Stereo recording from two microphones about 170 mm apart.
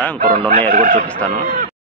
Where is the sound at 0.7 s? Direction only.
50° right (ahead or behind).